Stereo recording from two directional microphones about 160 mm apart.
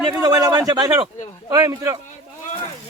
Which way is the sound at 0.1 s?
25° right (ahead or behind).